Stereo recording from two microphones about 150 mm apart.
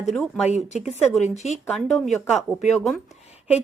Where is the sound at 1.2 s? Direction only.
50° left (ahead or behind).